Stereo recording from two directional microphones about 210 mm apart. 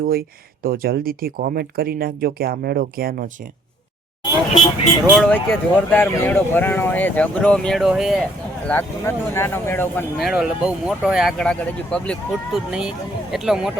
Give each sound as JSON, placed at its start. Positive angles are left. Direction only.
{"t": 0.0, "sound": "speech", "side_deg": -45}
{"t": 4.2, "sound": "a sound", "side_deg": 20}
{"t": 5.0, "sound": "speech", "side_deg": 0}
{"t": 10.2, "sound": "speech", "side_deg": 0}